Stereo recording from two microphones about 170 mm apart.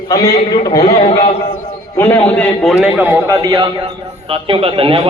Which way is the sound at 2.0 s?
10° left (ahead or behind).